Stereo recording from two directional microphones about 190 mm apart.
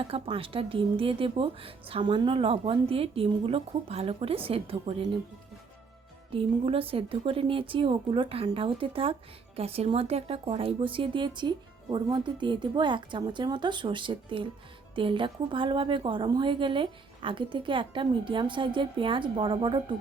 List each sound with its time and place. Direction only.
0.0 s speech: 30° right (ahead or behind)
6.3 s speech: 30° right (ahead or behind)